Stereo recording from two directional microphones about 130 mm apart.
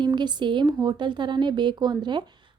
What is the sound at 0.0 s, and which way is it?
Speech, 35° right (ahead or behind).